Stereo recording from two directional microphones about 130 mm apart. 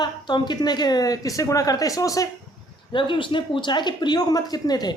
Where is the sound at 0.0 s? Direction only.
35° left (ahead or behind).